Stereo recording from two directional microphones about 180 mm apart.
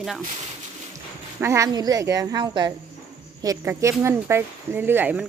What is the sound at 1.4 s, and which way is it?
Speech, 15° right (ahead or behind).